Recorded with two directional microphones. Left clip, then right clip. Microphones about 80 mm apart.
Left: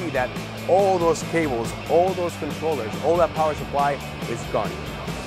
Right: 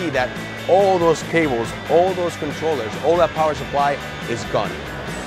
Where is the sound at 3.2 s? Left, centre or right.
Centre.